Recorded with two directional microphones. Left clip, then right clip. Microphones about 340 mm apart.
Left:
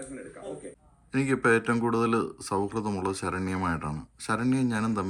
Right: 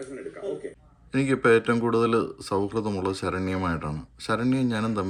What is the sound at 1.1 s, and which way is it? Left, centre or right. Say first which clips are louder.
Speech: right 3 dB; centre.